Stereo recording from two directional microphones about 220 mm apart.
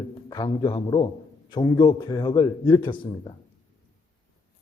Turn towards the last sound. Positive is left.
turn(degrees=20)  # may be behind; listen again after turning